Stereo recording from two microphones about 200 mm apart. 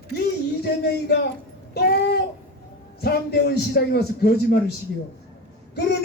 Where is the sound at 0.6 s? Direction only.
55° left (ahead or behind).